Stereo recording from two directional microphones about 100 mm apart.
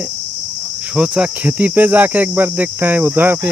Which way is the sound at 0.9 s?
10° right (ahead or behind).